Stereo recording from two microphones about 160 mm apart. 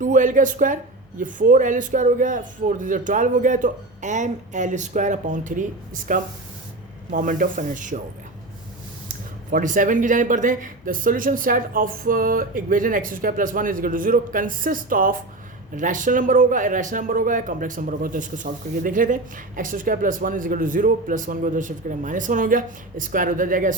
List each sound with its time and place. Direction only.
0.0 s speech: 55° right (ahead or behind)
9.0 s speech: 55° right (ahead or behind)